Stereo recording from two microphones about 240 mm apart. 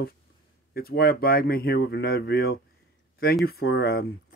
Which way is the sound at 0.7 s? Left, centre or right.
Left.